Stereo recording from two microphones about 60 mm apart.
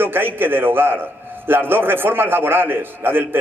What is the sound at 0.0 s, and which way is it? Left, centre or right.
A man's voice, right.